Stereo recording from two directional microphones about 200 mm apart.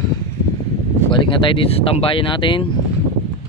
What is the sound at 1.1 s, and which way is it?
Speech, 25° left (ahead or behind).